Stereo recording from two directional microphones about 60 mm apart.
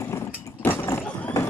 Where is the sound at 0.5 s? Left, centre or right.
Left.